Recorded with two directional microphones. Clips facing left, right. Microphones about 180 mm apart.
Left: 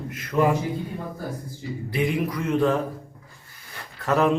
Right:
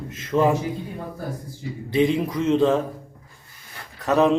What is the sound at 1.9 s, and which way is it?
Speech, 25° right (ahead or behind).